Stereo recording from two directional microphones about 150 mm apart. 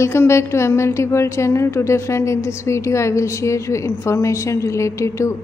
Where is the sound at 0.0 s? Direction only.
15° left (ahead or behind).